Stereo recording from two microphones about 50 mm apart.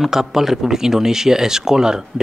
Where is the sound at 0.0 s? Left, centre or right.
Centre.